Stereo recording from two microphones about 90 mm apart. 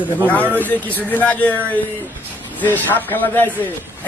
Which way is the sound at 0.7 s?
20° left (ahead or behind).